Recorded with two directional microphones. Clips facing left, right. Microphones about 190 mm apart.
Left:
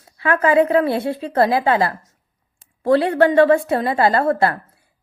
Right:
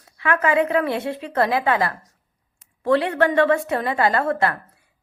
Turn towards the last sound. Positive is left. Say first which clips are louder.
# left 4 dB
turn(degrees=35)  # may be behind; listen again after turning